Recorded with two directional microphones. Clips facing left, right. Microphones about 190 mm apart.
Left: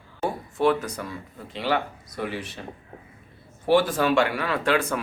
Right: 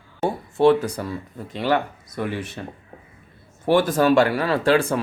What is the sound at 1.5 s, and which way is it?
Speech, 45° right (ahead or behind).